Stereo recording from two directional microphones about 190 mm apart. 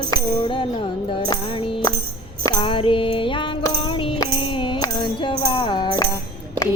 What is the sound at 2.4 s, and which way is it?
Music, 25° left (ahead or behind).